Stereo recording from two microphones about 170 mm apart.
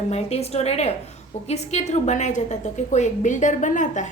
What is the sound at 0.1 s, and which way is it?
A woman's voice, 40° left (ahead or behind).